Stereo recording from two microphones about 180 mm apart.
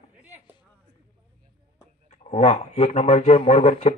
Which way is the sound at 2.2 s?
40° left (ahead or behind).